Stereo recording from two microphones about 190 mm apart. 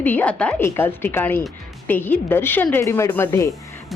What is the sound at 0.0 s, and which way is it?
Speech, 10° left (ahead or behind).